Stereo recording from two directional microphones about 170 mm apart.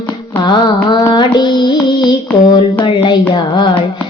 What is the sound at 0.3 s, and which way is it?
Child singing, 25° left (ahead or behind).